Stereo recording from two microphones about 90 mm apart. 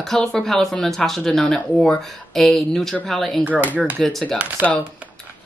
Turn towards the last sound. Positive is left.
turn(degrees=-20)  # may be behind; listen again after turning